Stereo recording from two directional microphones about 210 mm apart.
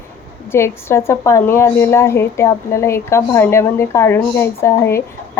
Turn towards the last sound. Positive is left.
turn(degrees=10)  # may be behind; listen again after turning